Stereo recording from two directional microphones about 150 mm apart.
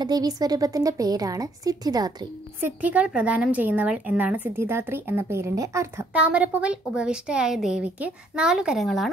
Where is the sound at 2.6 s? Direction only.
10° right (ahead or behind).